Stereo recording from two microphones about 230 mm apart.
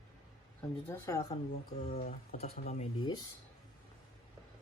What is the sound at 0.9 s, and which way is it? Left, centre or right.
Speech, centre.